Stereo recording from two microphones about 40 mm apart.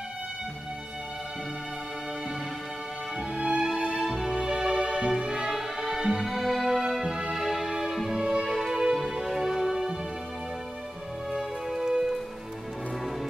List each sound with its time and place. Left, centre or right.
3.3 s music: centre
5.5 s music: centre
7.8 s music: centre
11.3 s music: centre